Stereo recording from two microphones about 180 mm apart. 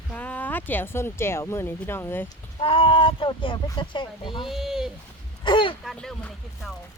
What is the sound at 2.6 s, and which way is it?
Speech, 30° left (ahead or behind).